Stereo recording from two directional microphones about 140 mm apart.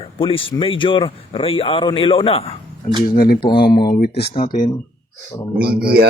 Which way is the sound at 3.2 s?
90° left.